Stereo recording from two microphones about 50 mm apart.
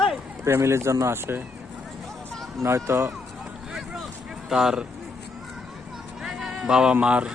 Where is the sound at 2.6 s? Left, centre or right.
Right.